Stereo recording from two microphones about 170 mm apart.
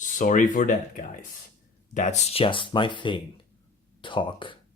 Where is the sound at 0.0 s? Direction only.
50° left (ahead or behind).